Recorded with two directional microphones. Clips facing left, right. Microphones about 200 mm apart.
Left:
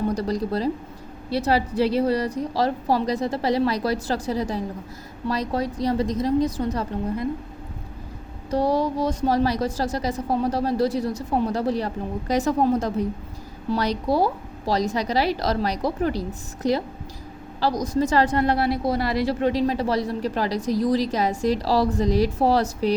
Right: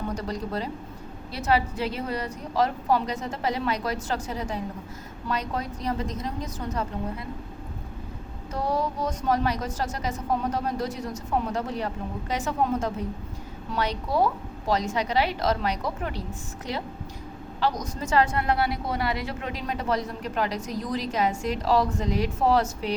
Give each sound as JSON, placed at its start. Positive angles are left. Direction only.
{"t": 0.1, "sound": "a woman's voice", "side_deg": 35}
{"t": 8.4, "sound": "a woman's voice", "side_deg": 35}
{"t": 17.6, "sound": "a woman's voice", "side_deg": 35}